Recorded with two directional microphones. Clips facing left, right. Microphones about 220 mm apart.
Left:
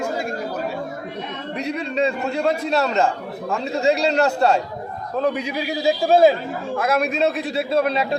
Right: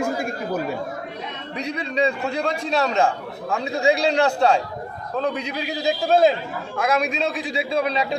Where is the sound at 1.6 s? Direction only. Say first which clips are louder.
Left 1 dB; 5° left (ahead or behind).